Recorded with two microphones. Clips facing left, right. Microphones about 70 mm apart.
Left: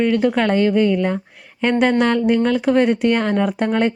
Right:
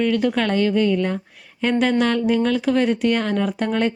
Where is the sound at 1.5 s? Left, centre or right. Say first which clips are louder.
Left 3 dB; left.